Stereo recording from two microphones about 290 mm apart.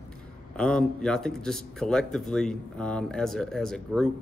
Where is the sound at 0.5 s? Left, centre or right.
Centre.